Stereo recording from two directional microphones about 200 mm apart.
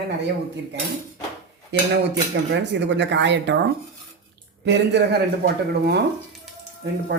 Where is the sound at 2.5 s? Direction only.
60° right (ahead or behind).